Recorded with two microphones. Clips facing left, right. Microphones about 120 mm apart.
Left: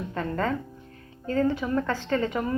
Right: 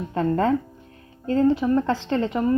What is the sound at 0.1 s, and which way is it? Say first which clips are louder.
A woman's voice: right 8 dB; 35° right (ahead or behind).